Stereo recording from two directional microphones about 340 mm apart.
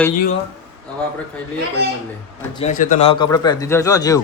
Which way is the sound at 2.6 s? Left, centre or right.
Left.